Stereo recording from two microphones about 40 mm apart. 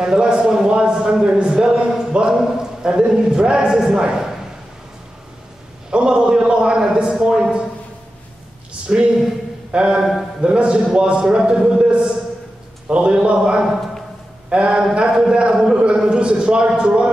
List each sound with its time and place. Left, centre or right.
0.0 s a man's voice: centre
5.9 s a man's voice: right
8.8 s a man's voice: right